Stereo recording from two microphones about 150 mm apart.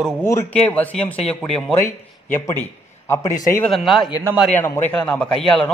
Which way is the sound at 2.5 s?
15° left (ahead or behind).